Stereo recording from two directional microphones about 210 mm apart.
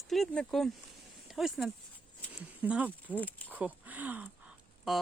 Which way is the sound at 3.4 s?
5° right (ahead or behind).